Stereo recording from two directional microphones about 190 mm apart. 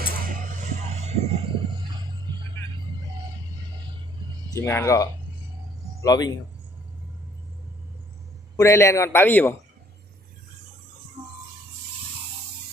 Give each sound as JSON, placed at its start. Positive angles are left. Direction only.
{"t": 0.0, "sound": "music", "side_deg": -45}
{"t": 4.5, "sound": "a man's voice", "side_deg": 15}
{"t": 8.5, "sound": "a man's voice", "side_deg": 15}
{"t": 11.2, "sound": "music", "side_deg": -25}